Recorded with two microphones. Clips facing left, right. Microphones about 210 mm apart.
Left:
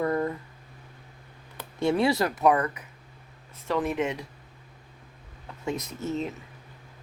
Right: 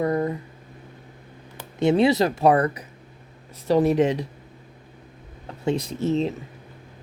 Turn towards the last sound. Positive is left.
turn(degrees=-30)  # may be behind; listen again after turning